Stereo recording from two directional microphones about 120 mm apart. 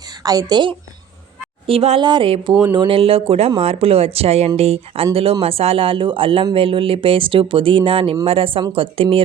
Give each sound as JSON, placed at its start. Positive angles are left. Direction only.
{"t": 0.0, "sound": "a woman's voice", "side_deg": -30}
{"t": 1.6, "sound": "speech", "side_deg": -55}
{"t": 2.0, "sound": "speech", "side_deg": -40}